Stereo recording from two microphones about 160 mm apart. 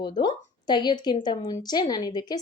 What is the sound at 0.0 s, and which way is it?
Speech, 25° left (ahead or behind).